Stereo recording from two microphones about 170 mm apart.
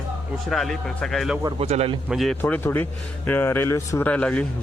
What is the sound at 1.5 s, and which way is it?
Speech, 35° right (ahead or behind).